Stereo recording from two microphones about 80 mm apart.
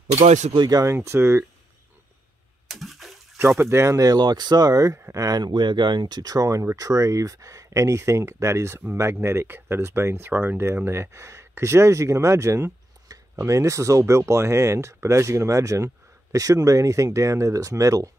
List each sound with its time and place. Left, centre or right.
0.6 s speech: right
0.9 s speech: right
2.7 s bathtub: centre
3.3 s speech: right
4.2 s speech: right
5.4 s speech: right